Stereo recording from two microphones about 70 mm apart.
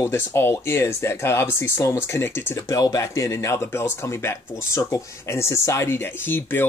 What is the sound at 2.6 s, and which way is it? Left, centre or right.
Speech, left.